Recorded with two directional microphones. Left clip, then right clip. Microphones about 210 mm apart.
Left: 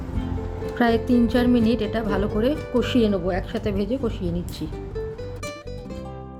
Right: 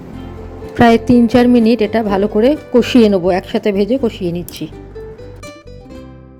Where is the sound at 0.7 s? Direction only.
25° right (ahead or behind).